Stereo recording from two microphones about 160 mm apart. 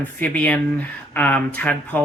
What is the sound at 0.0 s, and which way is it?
Speech, 10° left (ahead or behind).